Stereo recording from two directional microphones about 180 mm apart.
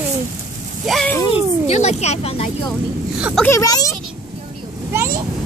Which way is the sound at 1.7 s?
40° left (ahead or behind).